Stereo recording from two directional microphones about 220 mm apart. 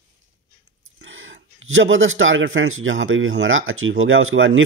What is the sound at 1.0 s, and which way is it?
A man's voice, 60° right (ahead or behind).